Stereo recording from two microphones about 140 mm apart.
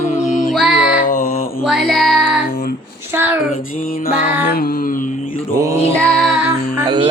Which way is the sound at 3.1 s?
15° right (ahead or behind).